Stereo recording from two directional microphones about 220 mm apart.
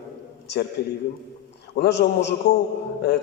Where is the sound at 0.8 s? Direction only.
45° left (ahead or behind).